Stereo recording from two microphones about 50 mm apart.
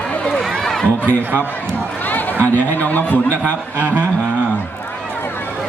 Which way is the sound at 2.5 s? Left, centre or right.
Left.